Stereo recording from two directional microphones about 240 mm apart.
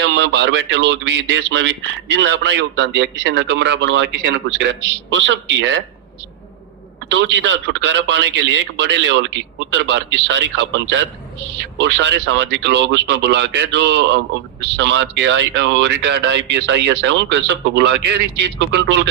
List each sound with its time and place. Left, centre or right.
0.0 s speech: right
7.1 s speech: right